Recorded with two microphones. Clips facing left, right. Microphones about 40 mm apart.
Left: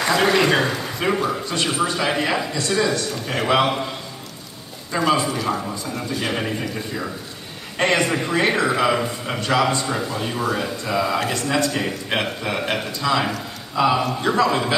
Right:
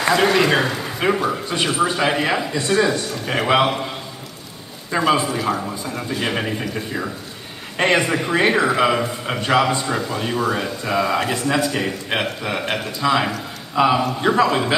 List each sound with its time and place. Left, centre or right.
0.0 s a man's voice: centre
1.9 s a man's voice: centre
4.9 s speech: centre
9.4 s a man's voice: right
9.8 s speech: centre
13.0 s speech: centre